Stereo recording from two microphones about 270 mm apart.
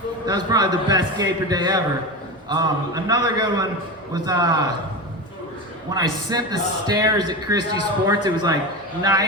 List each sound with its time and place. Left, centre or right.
0.3 s a man's voice: centre
5.9 s a man's voice: centre